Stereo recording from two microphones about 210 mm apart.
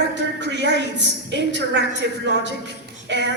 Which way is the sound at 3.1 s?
55° right (ahead or behind).